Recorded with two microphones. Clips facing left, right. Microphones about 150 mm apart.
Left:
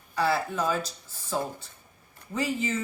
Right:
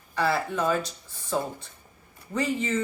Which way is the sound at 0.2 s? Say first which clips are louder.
Right 1 dB; centre (ahead or behind).